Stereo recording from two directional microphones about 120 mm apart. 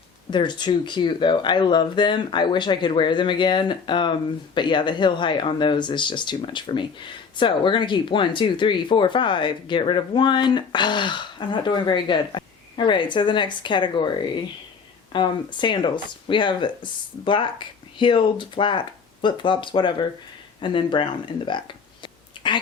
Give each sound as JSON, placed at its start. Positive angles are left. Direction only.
{"t": 0.3, "sound": "speech", "side_deg": 40}